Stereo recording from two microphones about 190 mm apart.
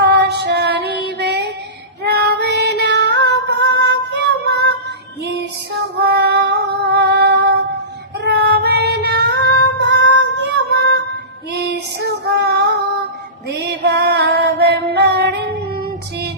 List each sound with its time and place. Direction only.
0.0 s child singing: 65° right (ahead or behind)
2.0 s female singing: 60° right (ahead or behind)
6.0 s female singing: 60° right (ahead or behind)
8.2 s child singing: 60° right (ahead or behind)
9.7 s female singing: 65° right (ahead or behind)
13.5 s music: 60° right (ahead or behind)